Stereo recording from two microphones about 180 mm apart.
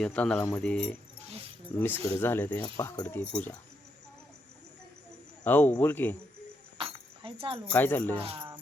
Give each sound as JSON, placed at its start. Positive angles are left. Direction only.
{"t": 0.0, "sound": "speech", "side_deg": 5}
{"t": 5.5, "sound": "speech", "side_deg": 10}
{"t": 7.2, "sound": "keys jangling", "side_deg": -30}
{"t": 7.7, "sound": "speech", "side_deg": 10}
{"t": 8.2, "sound": "cricket", "side_deg": -30}